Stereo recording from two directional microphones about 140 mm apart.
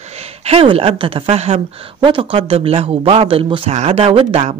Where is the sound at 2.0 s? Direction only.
35° right (ahead or behind).